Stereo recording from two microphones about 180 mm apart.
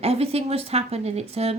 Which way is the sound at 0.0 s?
35° right (ahead or behind).